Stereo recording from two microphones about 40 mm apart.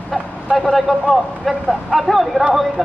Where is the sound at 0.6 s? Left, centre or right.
Centre.